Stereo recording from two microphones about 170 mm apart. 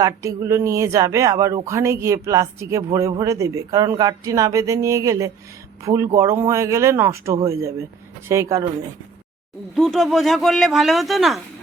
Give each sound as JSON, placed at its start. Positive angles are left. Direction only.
{"t": 0.0, "sound": "speech", "side_deg": -15}
{"t": 9.7, "sound": "speech", "side_deg": 0}